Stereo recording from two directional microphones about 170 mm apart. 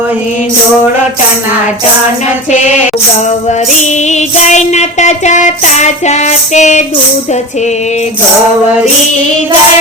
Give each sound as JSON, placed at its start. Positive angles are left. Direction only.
{"t": 3.8, "sound": "music", "side_deg": 45}